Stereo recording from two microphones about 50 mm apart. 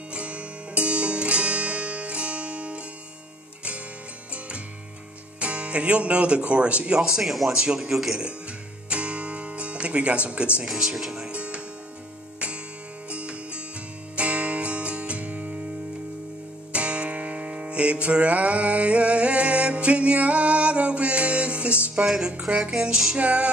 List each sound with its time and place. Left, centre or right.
0.1 s music: right
5.4 s speech: right
7.0 s speech: centre
8.8 s music: right
10.7 s speech: centre
11.2 s music: right
13.1 s music: right
16.7 s music: right
21.9 s speech: centre
23.1 s music: right